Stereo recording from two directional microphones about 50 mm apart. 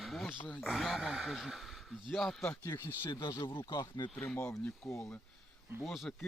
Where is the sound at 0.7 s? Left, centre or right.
Centre.